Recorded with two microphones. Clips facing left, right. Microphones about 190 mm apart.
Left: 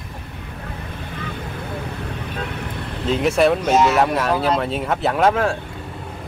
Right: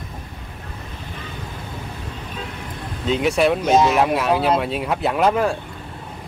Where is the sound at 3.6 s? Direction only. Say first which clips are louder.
Even; 15° right (ahead or behind).